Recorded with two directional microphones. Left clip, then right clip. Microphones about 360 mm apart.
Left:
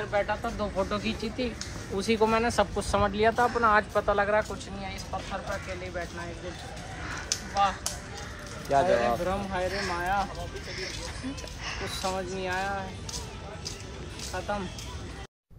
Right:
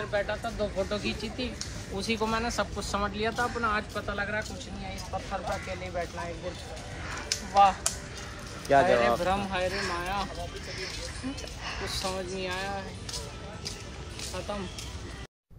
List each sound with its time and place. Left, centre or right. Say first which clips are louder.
0.1 s speech: left 3 dB; centre
7.2 s a sound: right 5 dB; centre
8.7 s speech: right 2 dB; right
9.2 s speech: right 1 dB; centre
11.6 s speech: left 1 dB; centre